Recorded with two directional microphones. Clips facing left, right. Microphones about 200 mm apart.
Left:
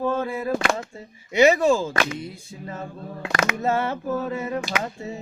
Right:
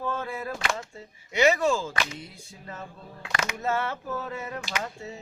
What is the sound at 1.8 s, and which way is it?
Speech, 55° left (ahead or behind).